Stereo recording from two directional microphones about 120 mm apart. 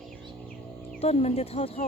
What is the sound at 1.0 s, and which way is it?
Speech, 60° left (ahead or behind).